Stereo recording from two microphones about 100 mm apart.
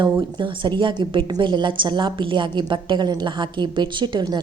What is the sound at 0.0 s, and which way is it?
A woman's voice, 50° right (ahead or behind).